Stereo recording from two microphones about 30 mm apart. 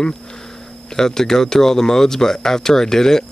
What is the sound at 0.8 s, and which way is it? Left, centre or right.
Speech, centre.